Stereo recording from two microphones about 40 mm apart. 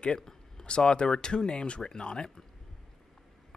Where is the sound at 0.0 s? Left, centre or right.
Centre.